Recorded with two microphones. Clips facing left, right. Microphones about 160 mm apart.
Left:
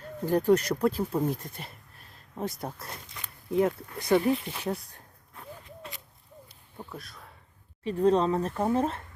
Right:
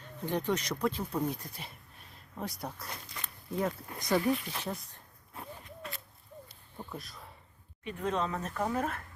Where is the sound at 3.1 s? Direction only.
10° left (ahead or behind).